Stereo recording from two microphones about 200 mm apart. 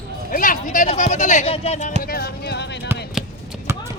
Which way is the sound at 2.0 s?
50° left (ahead or behind).